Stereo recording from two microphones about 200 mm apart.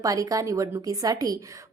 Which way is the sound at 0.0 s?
15° right (ahead or behind).